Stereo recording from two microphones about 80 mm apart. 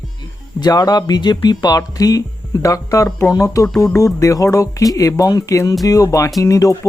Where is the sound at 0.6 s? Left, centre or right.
Left.